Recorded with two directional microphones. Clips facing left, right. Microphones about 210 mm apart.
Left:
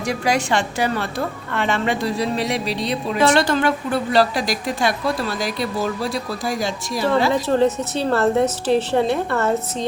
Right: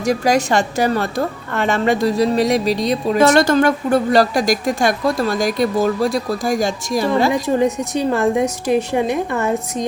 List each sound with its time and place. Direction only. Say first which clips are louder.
0.0 s a woman's voice: right 5 dB; 40° right (ahead or behind)
7.3 s a woman's voice: right 1 dB; 15° right (ahead or behind)